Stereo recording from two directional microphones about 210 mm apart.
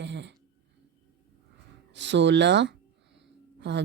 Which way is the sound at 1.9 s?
60° right (ahead or behind).